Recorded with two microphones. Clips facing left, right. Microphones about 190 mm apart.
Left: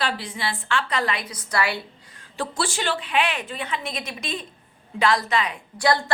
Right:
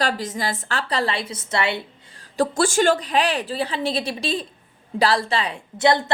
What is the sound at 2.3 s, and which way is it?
A woman's voice, 45° right (ahead or behind).